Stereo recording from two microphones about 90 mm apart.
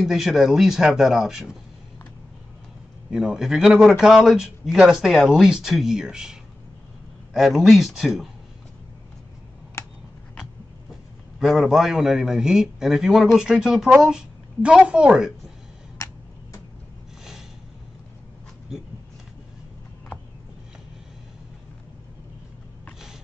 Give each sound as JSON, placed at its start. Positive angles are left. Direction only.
{"t": 0.0, "sound": "a man's voice", "side_deg": -5}
{"t": 3.1, "sound": "a man's voice", "side_deg": -5}
{"t": 7.3, "sound": "a man's voice", "side_deg": 0}
{"t": 11.3, "sound": "a man's voice", "side_deg": 0}
{"t": 16.0, "sound": "tick-tock", "side_deg": 40}